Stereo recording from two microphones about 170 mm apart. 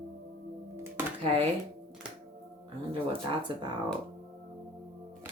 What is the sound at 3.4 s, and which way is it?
Speech, 25° right (ahead or behind).